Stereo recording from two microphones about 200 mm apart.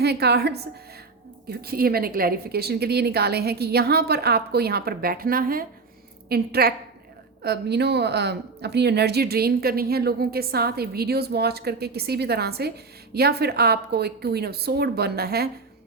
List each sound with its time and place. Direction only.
0.0 s speech: 55° right (ahead or behind)